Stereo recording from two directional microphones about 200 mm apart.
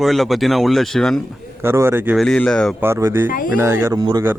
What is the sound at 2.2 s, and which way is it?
Speech, 5° left (ahead or behind).